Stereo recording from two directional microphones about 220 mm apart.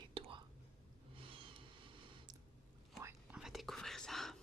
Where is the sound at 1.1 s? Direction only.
25° right (ahead or behind).